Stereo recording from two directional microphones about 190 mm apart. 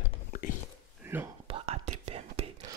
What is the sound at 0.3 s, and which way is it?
Whispering, 45° left (ahead or behind).